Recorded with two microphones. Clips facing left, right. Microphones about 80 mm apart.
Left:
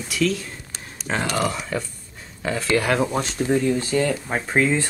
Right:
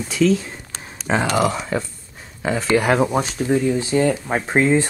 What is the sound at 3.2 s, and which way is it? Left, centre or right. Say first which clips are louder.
Speech: right 2 dB; centre.